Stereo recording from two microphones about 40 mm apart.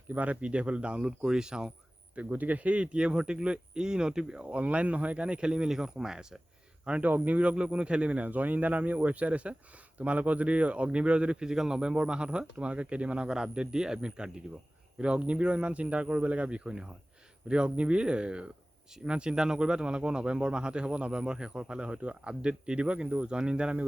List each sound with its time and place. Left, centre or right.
0.1 s speech: right; by 1.7 s centre
2.1 s speech: right; by 4.4 s centre
4.4 s speech: right
5.6 s speech: centre
7.0 s speech: right
7.5 s speech: right
13.2 s speech: centre